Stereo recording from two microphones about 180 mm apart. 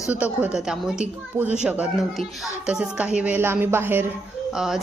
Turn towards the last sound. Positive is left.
turn(degrees=0)  # may be behind; listen again after turning